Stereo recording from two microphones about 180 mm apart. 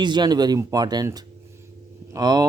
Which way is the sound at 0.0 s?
25° right (ahead or behind).